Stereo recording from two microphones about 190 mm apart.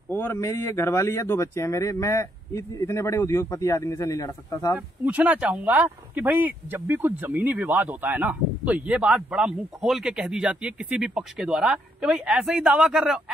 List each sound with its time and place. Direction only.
0.1 s speech: 10° left (ahead or behind)
4.7 s speech: 5° right (ahead or behind)